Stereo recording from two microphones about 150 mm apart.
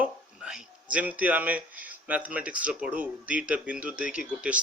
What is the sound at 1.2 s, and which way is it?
Speech, 10° right (ahead or behind).